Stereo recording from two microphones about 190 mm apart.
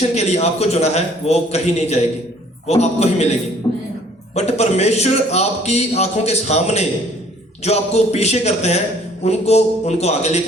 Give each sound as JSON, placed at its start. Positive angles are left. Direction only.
{"t": 0.1, "sound": "a man's voice", "side_deg": 35}
{"t": 3.6, "sound": "music", "side_deg": 25}
{"t": 4.4, "sound": "a man's voice", "side_deg": 35}